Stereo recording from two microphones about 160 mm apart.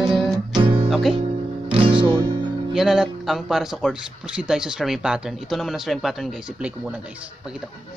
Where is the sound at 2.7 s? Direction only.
5° right (ahead or behind).